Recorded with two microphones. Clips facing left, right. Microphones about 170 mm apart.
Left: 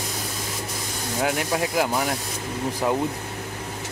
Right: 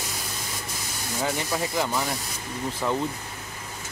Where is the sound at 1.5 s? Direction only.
10° left (ahead or behind).